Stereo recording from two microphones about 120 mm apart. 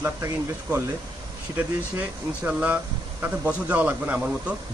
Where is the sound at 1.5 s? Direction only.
10° right (ahead or behind).